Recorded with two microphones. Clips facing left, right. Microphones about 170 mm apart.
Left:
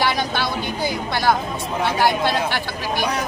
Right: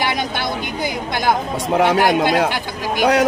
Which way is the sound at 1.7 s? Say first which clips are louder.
Right 5 dB; 75° right (ahead or behind).